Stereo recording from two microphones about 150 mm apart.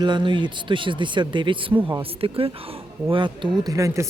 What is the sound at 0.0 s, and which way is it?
Speech, 30° right (ahead or behind).